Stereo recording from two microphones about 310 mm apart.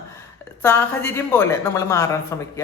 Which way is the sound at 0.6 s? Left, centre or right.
Centre.